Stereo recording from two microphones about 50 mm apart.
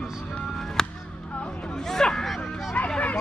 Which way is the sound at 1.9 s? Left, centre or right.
Centre.